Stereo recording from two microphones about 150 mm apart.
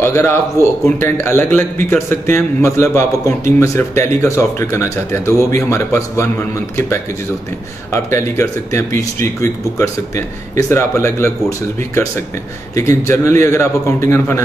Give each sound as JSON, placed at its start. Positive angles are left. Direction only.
{"t": 0.0, "sound": "speech", "side_deg": 15}
{"t": 7.9, "sound": "speech", "side_deg": 20}
{"t": 12.7, "sound": "speech", "side_deg": 20}